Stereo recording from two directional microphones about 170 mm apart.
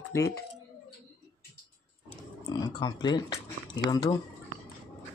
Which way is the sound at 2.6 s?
25° left (ahead or behind).